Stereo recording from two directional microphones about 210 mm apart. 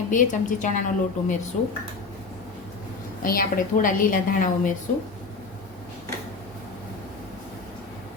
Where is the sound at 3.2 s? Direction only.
40° left (ahead or behind).